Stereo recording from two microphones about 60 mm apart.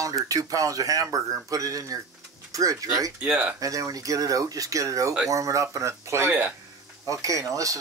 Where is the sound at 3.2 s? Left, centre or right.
Centre.